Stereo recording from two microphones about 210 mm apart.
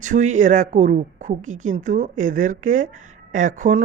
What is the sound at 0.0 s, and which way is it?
A woman's voice, 35° right (ahead or behind).